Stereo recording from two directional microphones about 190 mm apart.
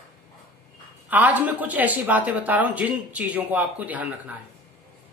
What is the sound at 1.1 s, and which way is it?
A man's voice, 10° right (ahead or behind).